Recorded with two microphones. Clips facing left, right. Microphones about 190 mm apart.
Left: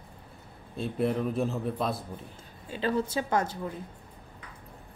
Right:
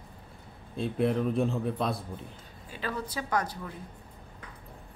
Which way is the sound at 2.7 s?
25° left (ahead or behind).